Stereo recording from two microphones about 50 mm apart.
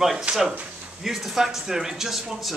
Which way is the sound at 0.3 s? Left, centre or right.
Centre.